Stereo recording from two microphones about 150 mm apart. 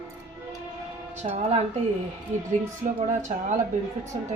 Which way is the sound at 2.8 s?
50° right (ahead or behind).